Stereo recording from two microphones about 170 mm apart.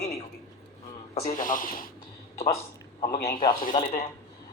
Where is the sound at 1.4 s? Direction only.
50° left (ahead or behind).